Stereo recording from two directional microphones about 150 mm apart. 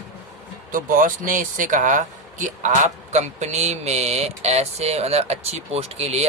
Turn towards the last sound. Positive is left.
turn(degrees=-45)  # may be behind; listen again after turning